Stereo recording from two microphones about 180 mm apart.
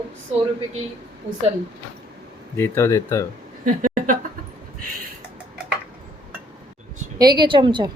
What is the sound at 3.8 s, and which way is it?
Speech, 45° right (ahead or behind).